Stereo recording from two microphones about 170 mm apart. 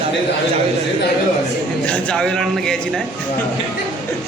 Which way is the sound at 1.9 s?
5° left (ahead or behind).